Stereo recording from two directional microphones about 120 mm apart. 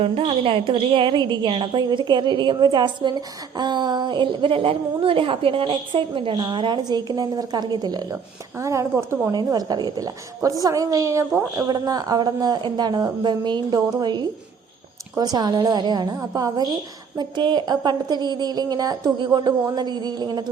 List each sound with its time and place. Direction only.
0.0 s a woman's voice: 55° right (ahead or behind); by 8.0 s 35° right (ahead or behind)
8.1 s speech: 25° right (ahead or behind)
9.3 s a woman's voice: 35° right (ahead or behind)